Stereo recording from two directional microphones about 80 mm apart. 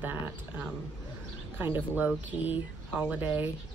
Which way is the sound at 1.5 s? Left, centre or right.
Right.